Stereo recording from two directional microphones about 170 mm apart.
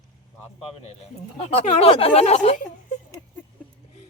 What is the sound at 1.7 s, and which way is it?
Speech, 35° left (ahead or behind).